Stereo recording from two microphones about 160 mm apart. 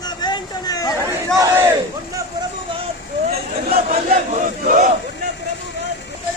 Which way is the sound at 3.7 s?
45° right (ahead or behind).